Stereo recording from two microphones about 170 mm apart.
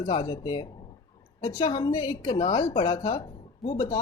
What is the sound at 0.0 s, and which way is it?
Speech, 30° left (ahead or behind).